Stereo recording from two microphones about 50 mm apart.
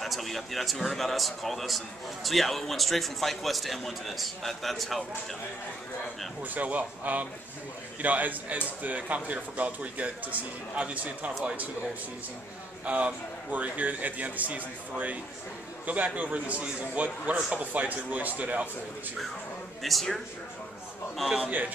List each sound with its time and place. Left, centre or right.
0.0 s a man's voice: centre
6.4 s a man's voice: right
12.8 s a man's voice: right
19.8 s a man's voice: centre
21.5 s a man's voice: right